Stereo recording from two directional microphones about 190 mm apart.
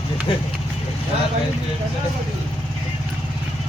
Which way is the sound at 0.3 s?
25° left (ahead or behind).